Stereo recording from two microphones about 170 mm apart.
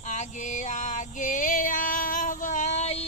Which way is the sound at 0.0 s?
45° left (ahead or behind).